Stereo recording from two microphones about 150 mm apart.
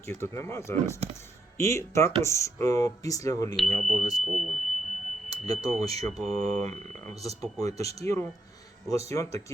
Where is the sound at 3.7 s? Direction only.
55° right (ahead or behind).